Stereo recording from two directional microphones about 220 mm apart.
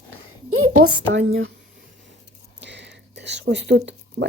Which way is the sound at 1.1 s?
60° right (ahead or behind).